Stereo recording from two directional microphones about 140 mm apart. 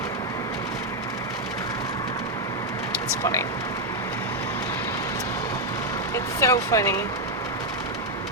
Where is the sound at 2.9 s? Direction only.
20° left (ahead or behind).